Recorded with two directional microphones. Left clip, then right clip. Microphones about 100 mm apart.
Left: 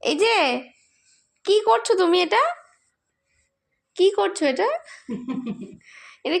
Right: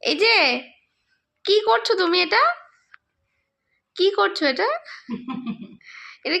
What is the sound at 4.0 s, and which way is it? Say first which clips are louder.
Speech: even; 30° left (ahead or behind).